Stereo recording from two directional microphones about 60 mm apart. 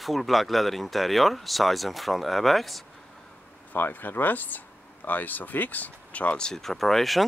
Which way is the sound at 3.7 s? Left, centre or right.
Left.